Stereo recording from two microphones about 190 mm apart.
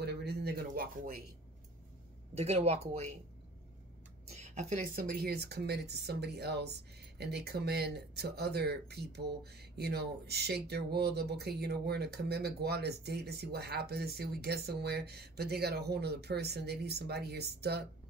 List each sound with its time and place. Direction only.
0.0 s a sound: 60° right (ahead or behind)
2.3 s a woman's voice: 35° right (ahead or behind)
4.4 s speech: 40° right (ahead or behind); by 17.8 s 60° right (ahead or behind)